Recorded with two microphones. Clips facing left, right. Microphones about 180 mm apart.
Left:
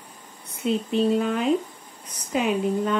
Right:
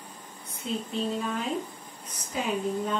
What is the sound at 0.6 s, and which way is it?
Speech, 70° left (ahead or behind).